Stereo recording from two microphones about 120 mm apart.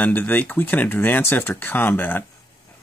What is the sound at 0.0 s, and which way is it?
Speech, 15° left (ahead or behind).